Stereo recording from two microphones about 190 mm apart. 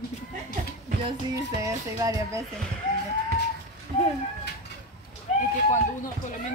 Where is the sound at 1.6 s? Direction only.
15° right (ahead or behind).